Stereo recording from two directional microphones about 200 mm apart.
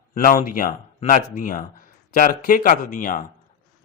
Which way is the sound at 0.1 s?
40° left (ahead or behind).